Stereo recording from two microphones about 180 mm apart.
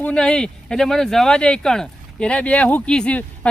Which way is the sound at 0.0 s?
5° left (ahead or behind).